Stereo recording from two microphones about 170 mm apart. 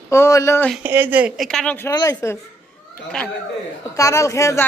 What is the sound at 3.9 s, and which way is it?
Speech, 20° left (ahead or behind).